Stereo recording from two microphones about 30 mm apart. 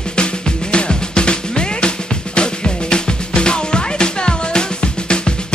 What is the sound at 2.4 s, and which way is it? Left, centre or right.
Music, left.